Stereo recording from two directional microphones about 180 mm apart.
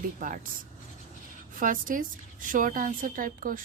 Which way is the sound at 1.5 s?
50° right (ahead or behind).